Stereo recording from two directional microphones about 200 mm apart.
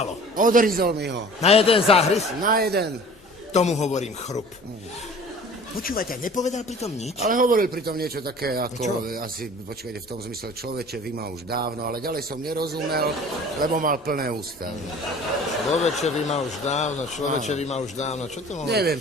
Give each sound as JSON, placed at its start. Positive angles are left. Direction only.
{"t": 0.3, "sound": "speech", "side_deg": -40}
{"t": 1.4, "sound": "a man's voice", "side_deg": 30}
{"t": 2.4, "sound": "speech", "side_deg": -45}
{"t": 3.5, "sound": "a man's voice", "side_deg": 35}
{"t": 5.7, "sound": "a man's voice", "side_deg": 45}
{"t": 7.2, "sound": "speech", "side_deg": -45}
{"t": 10.8, "sound": "speech", "side_deg": -50}
{"t": 15.8, "sound": "a man's voice", "side_deg": 35}
{"t": 18.7, "sound": "speech", "side_deg": -55}